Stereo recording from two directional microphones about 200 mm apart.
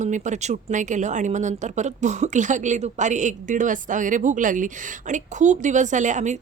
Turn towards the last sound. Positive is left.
turn(degrees=-35)  # may be behind; listen again after turning